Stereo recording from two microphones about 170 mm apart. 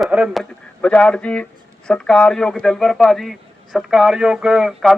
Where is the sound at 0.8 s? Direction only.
5° left (ahead or behind).